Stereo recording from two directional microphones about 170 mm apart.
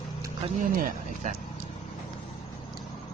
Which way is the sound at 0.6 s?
50° right (ahead or behind).